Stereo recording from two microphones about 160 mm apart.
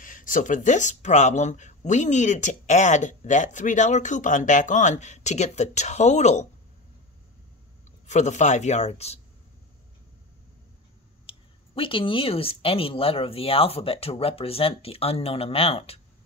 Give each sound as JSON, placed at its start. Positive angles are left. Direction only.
{"t": 0.0, "sound": "speech", "side_deg": 60}
{"t": 8.1, "sound": "speech", "side_deg": 45}
{"t": 11.2, "sound": "speech", "side_deg": 35}